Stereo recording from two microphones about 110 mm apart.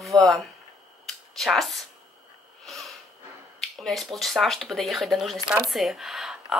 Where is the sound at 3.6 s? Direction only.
5° left (ahead or behind).